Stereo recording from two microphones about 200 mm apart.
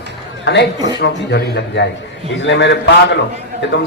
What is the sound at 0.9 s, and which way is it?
A man's voice, 55° left (ahead or behind).